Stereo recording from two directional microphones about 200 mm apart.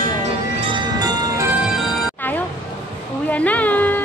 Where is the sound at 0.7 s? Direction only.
20° right (ahead or behind).